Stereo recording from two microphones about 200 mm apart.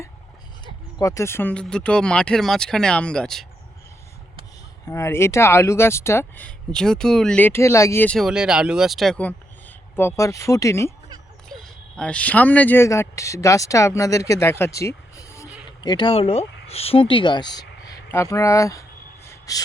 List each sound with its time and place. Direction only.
0.6 s speech: 20° left (ahead or behind); by 3.4 s 5° left (ahead or behind)
4.9 s speech: 15° left (ahead or behind)
11.4 s speech: 5° left (ahead or behind); by 17.7 s 20° left (ahead or behind)
17.8 s a sound: 15° left (ahead or behind)